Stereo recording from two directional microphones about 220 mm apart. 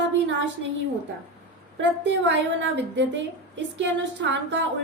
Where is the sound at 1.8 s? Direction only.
55° right (ahead or behind).